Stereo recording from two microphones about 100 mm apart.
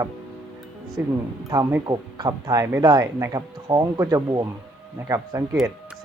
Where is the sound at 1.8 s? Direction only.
40° right (ahead or behind).